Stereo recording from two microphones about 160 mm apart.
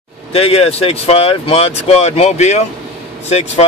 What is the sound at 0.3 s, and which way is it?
Speech, 40° left (ahead or behind).